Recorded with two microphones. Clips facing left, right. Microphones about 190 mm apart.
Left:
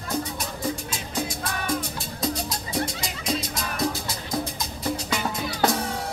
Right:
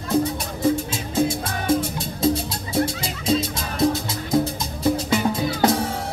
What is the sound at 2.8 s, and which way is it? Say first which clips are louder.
Music: right 6 dB; 25° right (ahead or behind).